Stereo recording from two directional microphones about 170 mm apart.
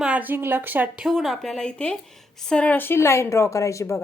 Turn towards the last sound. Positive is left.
turn(degrees=15)  # may be behind; listen again after turning